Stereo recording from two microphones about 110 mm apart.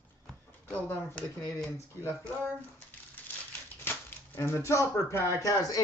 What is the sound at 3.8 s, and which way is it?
Speech, 20° left (ahead or behind).